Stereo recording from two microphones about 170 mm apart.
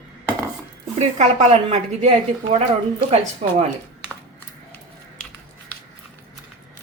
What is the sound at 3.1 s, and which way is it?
Speech, 40° right (ahead or behind).